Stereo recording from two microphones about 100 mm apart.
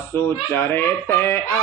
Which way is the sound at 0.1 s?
25° left (ahead or behind).